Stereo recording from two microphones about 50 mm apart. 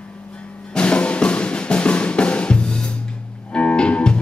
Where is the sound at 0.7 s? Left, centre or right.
Left.